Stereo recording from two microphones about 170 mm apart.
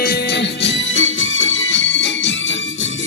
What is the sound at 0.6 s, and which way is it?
Music, 90° left.